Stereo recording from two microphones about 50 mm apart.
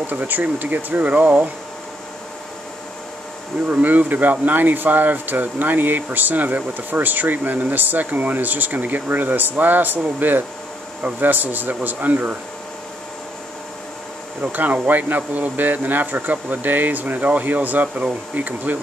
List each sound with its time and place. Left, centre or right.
0.0 s speech: right
3.6 s speech: right
14.5 s speech: right